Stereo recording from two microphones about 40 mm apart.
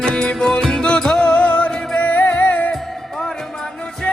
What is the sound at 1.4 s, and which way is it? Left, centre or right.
Music, left.